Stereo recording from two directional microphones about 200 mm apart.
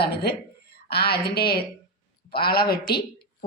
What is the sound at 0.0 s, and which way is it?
A woman's voice, 55° left (ahead or behind).